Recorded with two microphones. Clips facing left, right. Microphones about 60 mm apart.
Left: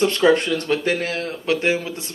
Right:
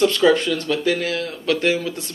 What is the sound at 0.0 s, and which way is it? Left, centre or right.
Mantra, left.